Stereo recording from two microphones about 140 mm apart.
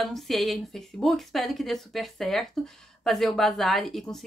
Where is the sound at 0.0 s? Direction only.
Centre (ahead or behind).